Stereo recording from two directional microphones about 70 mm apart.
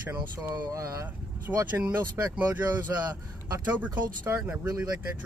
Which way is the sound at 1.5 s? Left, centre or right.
Right.